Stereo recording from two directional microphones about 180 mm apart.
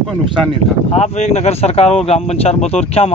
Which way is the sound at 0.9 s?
35° left (ahead or behind).